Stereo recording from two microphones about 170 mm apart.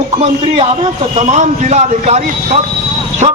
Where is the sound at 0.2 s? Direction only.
35° right (ahead or behind).